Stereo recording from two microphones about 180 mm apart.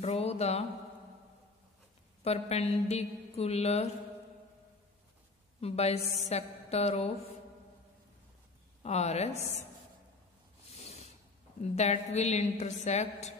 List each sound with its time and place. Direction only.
0.0 s a woman's voice: 35° left (ahead or behind)
2.2 s a woman's voice: 35° left (ahead or behind)
5.6 s a woman's voice: 35° left (ahead or behind)
8.8 s a woman's voice: 35° left (ahead or behind)
10.7 s a sound: 35° left (ahead or behind)
11.6 s a woman's voice: 35° left (ahead or behind)